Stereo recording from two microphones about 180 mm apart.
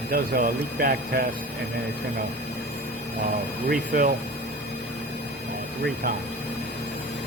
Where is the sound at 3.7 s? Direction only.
50° right (ahead or behind).